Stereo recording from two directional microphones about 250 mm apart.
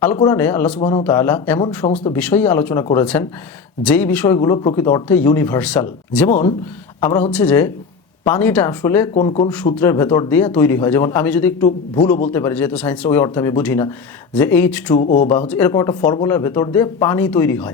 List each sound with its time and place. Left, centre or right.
0.2 s speech: centre
4.4 s speech: centre
9.1 s speech: left
9.7 s speech: centre
14.9 s speech: left
15.4 s speech: centre